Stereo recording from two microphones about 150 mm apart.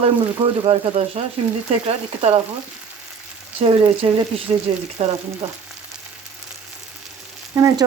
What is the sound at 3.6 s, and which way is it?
A woman's voice, 35° right (ahead or behind).